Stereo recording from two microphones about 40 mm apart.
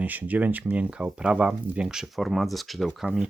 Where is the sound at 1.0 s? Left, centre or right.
Right.